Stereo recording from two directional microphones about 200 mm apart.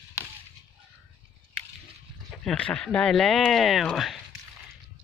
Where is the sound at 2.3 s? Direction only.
5° left (ahead or behind).